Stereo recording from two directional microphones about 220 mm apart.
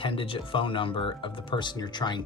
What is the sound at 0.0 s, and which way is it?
Speech, 25° left (ahead or behind).